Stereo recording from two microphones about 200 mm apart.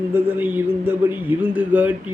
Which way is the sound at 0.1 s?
10° right (ahead or behind).